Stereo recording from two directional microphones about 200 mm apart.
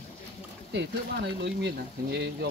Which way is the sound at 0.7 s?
60° right (ahead or behind).